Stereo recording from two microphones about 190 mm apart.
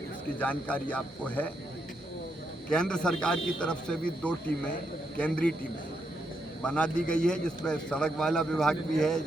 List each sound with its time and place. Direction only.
0.3 s speech: 5° left (ahead or behind)
2.6 s a man's voice: 5° left (ahead or behind)
6.6 s a man's voice: 5° left (ahead or behind)